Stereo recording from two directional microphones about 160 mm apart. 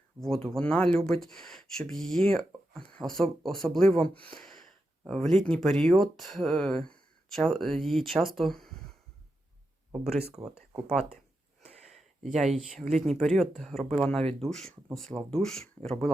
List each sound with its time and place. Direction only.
0.2 s speech: 5° left (ahead or behind)
11.6 s sniff: 40° right (ahead or behind)
12.2 s speech: centre (ahead or behind)